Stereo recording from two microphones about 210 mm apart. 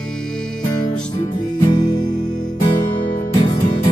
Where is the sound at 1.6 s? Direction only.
20° left (ahead or behind).